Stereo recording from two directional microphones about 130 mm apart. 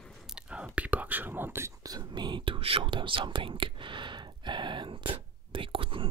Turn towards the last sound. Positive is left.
turn(degrees=-45)  # may be behind; listen again after turning